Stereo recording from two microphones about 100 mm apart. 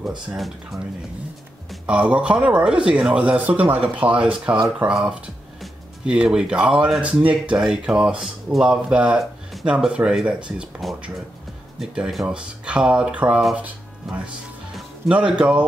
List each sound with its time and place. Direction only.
0.3 s speech: centre (ahead or behind)
1.9 s speech: 10° right (ahead or behind)
9.2 s a sound: centre (ahead or behind)
9.7 s speech: 10° right (ahead or behind)
11.8 s speech: 5° right (ahead or behind)